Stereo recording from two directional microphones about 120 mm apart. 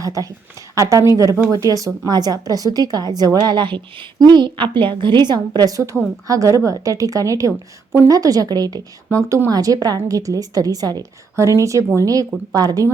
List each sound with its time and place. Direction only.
0.0 s a woman's voice: 30° right (ahead or behind)